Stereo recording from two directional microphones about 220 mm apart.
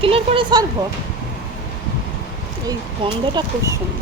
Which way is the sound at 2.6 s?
20° right (ahead or behind).